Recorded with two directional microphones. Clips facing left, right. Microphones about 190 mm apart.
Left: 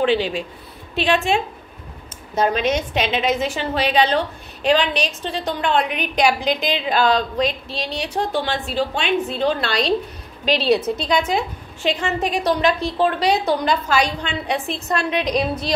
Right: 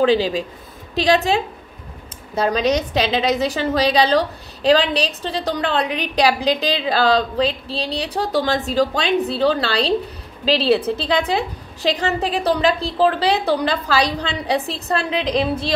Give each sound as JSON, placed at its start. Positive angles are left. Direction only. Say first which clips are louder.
{"t": 0.0, "sound": "a woman's voice", "louder": "right 3 dB", "side_deg": -40}